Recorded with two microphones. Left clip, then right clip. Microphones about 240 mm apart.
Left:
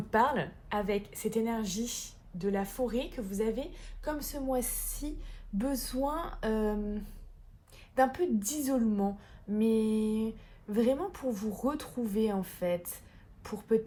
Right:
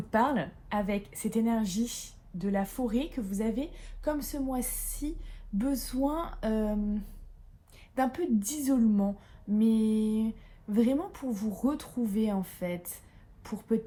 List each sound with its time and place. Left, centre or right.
0.1 s a woman's voice: left
7.9 s a woman's voice: left